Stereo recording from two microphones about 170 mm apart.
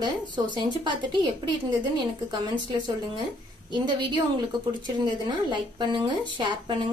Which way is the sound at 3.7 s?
25° right (ahead or behind).